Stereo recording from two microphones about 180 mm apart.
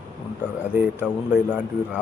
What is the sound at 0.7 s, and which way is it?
Speech, 10° right (ahead or behind).